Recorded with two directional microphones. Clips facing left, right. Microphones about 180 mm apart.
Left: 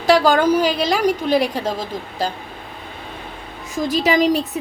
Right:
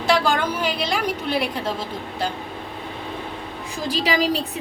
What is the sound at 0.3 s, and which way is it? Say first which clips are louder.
A woman's voice: left 8 dB; 40° left (ahead or behind).